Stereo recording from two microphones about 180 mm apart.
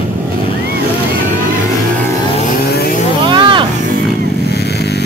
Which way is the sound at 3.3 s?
25° right (ahead or behind).